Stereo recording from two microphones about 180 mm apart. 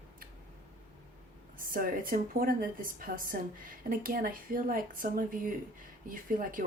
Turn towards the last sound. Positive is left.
turn(degrees=-50)  # may be behind; listen again after turning